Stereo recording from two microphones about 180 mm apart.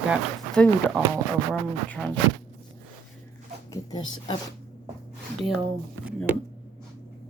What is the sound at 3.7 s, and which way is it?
Speech, 20° left (ahead or behind).